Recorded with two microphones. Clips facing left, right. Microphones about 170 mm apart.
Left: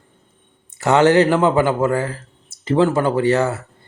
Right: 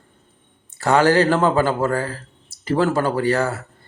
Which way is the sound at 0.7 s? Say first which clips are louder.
Left 2 dB; 20° left (ahead or behind).